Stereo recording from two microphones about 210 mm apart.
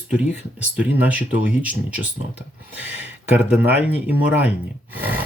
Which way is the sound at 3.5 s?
5° right (ahead or behind).